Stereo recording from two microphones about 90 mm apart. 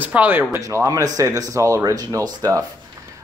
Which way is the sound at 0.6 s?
35° right (ahead or behind).